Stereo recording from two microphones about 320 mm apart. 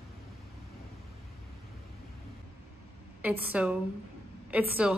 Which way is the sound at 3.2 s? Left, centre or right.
Centre.